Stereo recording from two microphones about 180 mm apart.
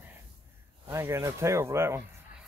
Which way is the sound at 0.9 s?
15° right (ahead or behind).